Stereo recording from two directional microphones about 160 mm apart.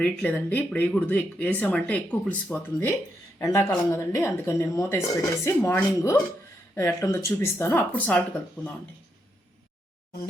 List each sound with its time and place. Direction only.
0.0 s speech: 5° left (ahead or behind)